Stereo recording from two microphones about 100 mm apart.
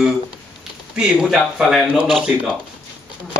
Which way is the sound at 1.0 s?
5° right (ahead or behind).